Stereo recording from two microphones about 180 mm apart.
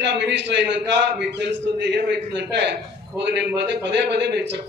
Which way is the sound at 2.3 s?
75° right (ahead or behind).